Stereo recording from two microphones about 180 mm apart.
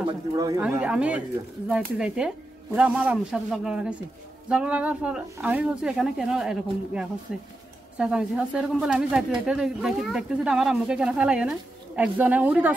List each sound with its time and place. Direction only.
0.3 s speech: 20° right (ahead or behind)